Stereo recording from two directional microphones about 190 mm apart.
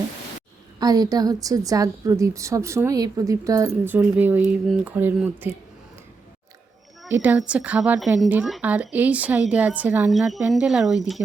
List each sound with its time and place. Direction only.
0.8 s a woman's voice: 20° right (ahead or behind)
7.1 s a woman's voice: 10° right (ahead or behind)